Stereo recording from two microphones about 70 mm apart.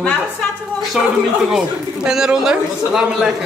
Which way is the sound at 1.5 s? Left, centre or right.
Centre.